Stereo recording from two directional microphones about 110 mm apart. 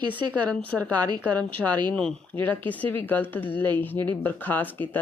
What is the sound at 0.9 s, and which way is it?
Speech, 40° right (ahead or behind).